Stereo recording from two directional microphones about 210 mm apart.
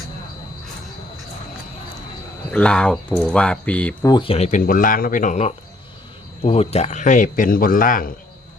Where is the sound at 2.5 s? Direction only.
5° left (ahead or behind).